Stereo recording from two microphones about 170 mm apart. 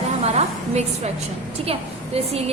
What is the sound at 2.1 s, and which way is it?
Speech, 35° right (ahead or behind).